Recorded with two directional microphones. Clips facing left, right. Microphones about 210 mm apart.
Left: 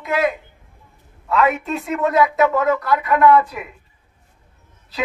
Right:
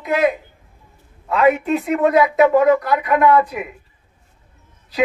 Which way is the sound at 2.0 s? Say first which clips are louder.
Right 2 dB; 15° right (ahead or behind).